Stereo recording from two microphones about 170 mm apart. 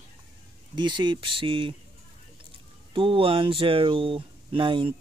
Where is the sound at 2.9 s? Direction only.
30° right (ahead or behind).